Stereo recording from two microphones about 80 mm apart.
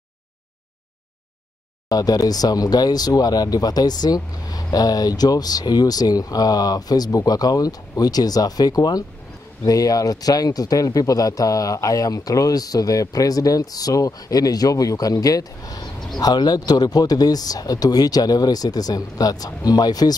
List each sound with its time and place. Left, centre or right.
1.9 s speech: left